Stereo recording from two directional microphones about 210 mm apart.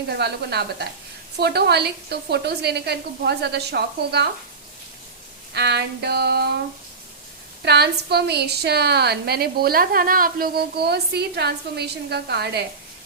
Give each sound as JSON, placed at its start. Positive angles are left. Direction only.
{"t": 0.1, "sound": "a woman's voice", "side_deg": -50}
{"t": 5.5, "sound": "a woman's voice", "side_deg": -50}
{"t": 7.6, "sound": "a woman's voice", "side_deg": -50}